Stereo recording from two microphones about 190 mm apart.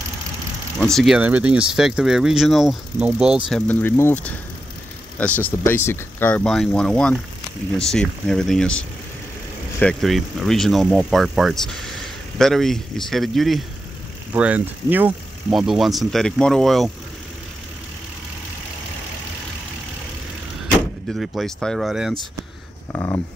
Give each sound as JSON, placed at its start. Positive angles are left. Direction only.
{"t": 0.7, "sound": "speech", "side_deg": 0}
{"t": 3.6, "sound": "speech", "side_deg": 10}
{"t": 20.6, "sound": "speech", "side_deg": 0}
{"t": 22.9, "sound": "speech", "side_deg": 15}